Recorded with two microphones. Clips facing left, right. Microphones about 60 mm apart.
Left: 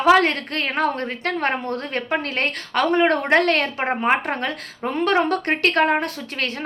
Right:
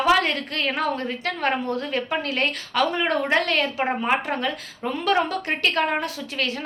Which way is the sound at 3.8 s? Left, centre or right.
Left.